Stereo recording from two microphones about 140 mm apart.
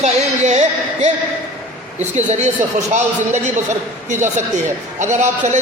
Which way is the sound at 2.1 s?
55° right (ahead or behind).